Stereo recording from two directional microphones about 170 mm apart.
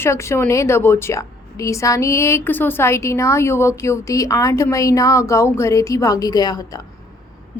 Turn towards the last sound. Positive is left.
turn(degrees=20)  # may be behind; listen again after turning